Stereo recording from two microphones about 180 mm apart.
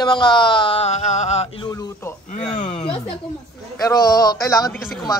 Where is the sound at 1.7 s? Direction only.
20° left (ahead or behind).